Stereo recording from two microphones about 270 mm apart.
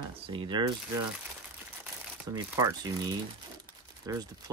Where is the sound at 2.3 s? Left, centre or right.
Centre.